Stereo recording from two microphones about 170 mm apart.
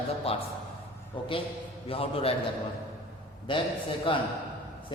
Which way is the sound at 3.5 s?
30° left (ahead or behind).